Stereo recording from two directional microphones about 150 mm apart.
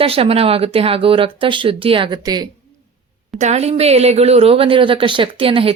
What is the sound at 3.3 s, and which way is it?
Speech, 50° right (ahead or behind).